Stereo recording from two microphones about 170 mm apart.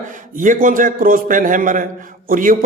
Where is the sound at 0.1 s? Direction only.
50° right (ahead or behind).